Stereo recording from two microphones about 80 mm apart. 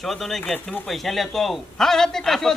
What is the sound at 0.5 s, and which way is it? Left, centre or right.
Speech, centre.